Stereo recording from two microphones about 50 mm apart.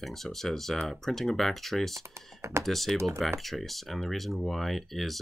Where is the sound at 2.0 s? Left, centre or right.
Right.